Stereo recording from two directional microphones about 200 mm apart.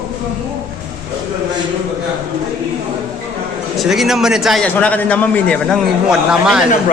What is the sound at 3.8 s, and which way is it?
A man's voice, centre (ahead or behind).